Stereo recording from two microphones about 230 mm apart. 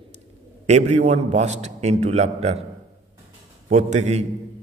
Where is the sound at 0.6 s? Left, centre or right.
Right.